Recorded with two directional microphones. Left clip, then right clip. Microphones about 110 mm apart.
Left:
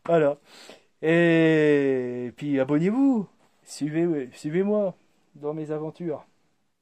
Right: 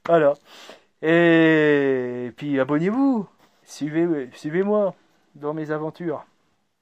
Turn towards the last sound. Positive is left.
turn(degrees=5)  # may be behind; listen again after turning